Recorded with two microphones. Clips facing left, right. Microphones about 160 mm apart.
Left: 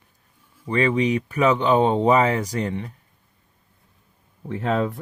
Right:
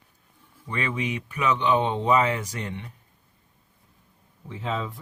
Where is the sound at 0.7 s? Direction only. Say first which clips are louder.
Left 9 dB; 35° left (ahead or behind).